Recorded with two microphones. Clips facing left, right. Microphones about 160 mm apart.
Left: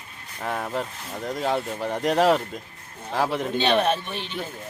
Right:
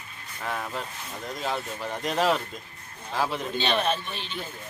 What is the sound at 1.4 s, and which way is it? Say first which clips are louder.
A man's voice: left 6 dB; 55° left (ahead or behind).